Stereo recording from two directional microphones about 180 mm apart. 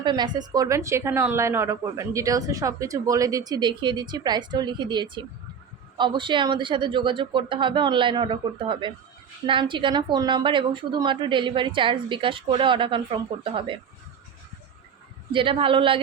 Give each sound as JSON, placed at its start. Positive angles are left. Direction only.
{"t": 0.0, "sound": "a woman's voice", "side_deg": -25}
{"t": 15.3, "sound": "a woman's voice", "side_deg": -30}